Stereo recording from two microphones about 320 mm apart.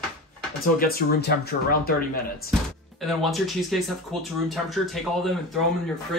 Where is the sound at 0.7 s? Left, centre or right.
Left.